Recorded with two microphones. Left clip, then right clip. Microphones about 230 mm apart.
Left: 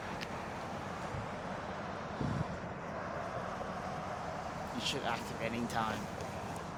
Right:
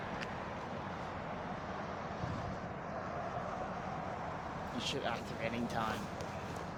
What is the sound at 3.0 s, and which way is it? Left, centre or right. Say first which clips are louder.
Vehicle: left 1 dB; left.